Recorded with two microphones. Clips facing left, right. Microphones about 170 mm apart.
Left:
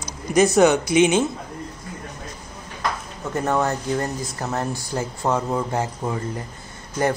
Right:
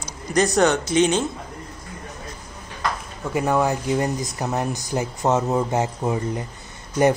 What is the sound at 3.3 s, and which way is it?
Speech, 10° right (ahead or behind).